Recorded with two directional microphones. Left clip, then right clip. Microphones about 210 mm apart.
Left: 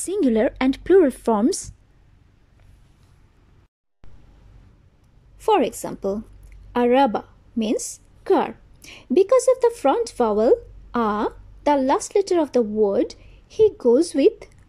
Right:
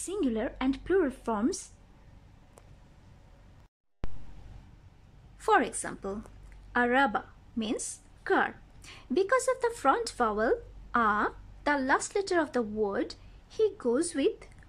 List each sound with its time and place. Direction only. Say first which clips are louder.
0.0 s a woman's voice: left 12 dB; 20° left (ahead or behind)
4.0 s a sound: right 10 dB; centre (ahead or behind)
5.4 s a woman's voice: left 7 dB; 15° left (ahead or behind)